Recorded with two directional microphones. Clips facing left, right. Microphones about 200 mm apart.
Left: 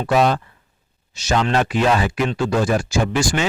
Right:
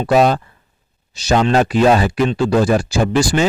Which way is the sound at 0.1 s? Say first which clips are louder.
Right 4 dB; 40° right (ahead or behind).